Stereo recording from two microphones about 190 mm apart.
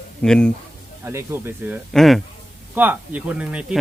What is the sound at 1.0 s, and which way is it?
Speech, 15° right (ahead or behind).